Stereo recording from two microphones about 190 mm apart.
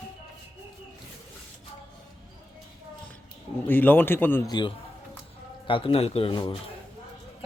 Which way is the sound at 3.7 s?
10° left (ahead or behind).